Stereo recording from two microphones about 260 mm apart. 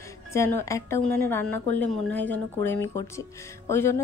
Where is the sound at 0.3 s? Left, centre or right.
Centre.